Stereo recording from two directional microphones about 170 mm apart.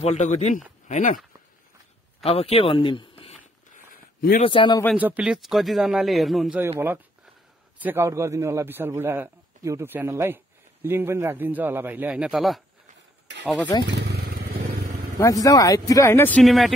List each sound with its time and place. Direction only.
0.0 s speech: 40° left (ahead or behind)
2.2 s speech: 35° left (ahead or behind)
4.5 s a man's voice: 30° left (ahead or behind)
4.9 s a man's voice: 10° right (ahead or behind)
6.6 s a man's voice: 15° right (ahead or behind)
13.7 s a man's voice: 20° left (ahead or behind)
14.0 s vehicle: 70° right (ahead or behind)
15.1 s speech: 20° left (ahead or behind); by 16.7 s centre (ahead or behind)